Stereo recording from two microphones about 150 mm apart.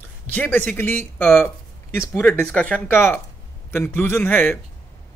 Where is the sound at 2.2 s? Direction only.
5° left (ahead or behind).